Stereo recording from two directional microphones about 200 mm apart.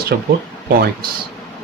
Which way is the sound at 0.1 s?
50° right (ahead or behind).